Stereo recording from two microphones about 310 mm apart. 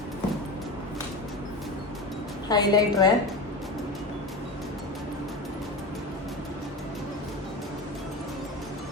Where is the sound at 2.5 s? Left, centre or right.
Centre.